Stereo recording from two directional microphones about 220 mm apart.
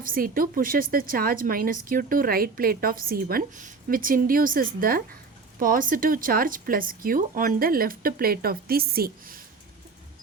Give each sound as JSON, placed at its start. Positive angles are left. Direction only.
{"t": 0.0, "sound": "a woman's voice", "side_deg": -40}